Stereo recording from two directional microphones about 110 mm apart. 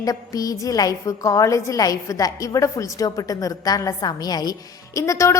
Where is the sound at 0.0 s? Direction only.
35° left (ahead or behind).